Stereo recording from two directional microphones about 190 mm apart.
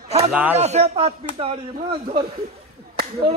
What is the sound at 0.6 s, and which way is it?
A man's voice, 35° right (ahead or behind).